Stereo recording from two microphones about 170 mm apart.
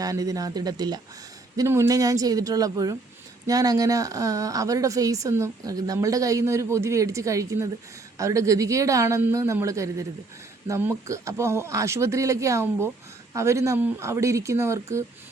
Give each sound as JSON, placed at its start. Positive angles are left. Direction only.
{"t": 0.0, "sound": "a woman's voice", "side_deg": -20}